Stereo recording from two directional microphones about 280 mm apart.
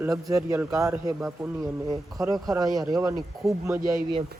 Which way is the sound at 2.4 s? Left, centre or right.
Centre.